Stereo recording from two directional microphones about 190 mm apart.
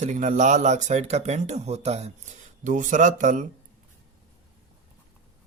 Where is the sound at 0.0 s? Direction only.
40° right (ahead or behind).